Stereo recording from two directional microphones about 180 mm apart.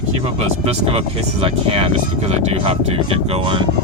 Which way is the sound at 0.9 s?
30° right (ahead or behind).